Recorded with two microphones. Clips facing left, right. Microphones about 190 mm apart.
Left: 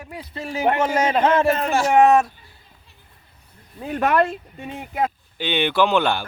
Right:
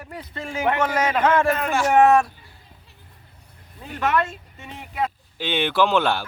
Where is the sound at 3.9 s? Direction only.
50° left (ahead or behind).